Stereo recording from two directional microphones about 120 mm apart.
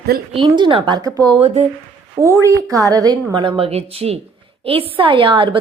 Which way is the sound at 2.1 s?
25° right (ahead or behind).